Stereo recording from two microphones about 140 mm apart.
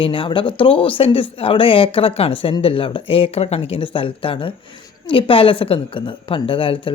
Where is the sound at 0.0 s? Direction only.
40° left (ahead or behind).